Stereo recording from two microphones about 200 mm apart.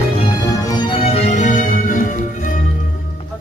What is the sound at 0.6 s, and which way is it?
Music, 20° left (ahead or behind).